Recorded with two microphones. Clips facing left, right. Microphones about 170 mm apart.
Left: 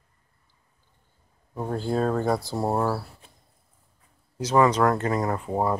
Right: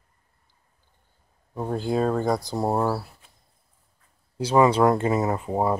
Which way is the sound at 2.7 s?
5° right (ahead or behind).